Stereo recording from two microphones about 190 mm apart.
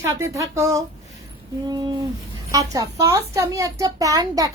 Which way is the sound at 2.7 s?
15° right (ahead or behind).